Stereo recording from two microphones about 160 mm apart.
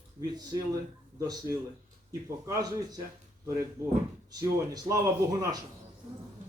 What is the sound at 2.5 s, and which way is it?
Speech, 20° right (ahead or behind).